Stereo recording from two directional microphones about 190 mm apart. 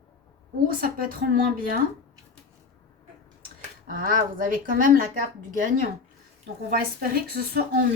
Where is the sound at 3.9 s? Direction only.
50° right (ahead or behind).